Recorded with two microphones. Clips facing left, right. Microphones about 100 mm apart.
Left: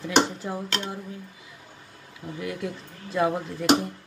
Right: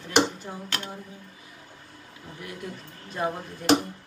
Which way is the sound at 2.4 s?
90° left.